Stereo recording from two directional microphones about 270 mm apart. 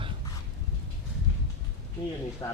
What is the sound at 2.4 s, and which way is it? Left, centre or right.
Speech, centre.